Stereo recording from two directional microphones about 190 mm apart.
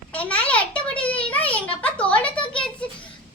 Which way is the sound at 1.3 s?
5° left (ahead or behind).